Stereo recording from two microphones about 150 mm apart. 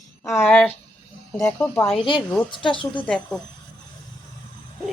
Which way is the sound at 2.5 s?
35° left (ahead or behind).